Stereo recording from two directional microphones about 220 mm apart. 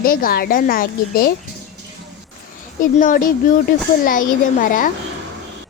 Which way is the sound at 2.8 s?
40° left (ahead or behind).